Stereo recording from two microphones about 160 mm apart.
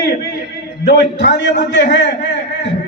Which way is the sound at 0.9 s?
90° left.